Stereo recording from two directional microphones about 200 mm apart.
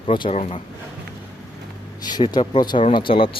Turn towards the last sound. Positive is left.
turn(degrees=25)  # may be behind; listen again after turning